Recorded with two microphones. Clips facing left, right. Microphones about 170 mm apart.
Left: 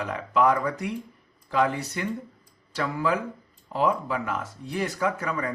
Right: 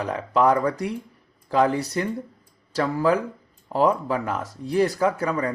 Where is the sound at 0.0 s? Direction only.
35° right (ahead or behind).